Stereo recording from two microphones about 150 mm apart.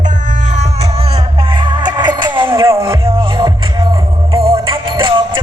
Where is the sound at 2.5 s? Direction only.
20° right (ahead or behind).